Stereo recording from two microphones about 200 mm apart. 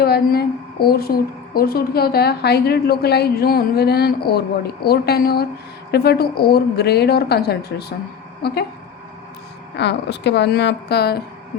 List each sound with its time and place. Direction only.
0.0 s a woman's voice: 50° left (ahead or behind)
9.7 s a woman's voice: 60° left (ahead or behind)